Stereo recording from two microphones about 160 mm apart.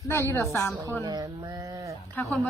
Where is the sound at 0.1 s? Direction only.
15° left (ahead or behind).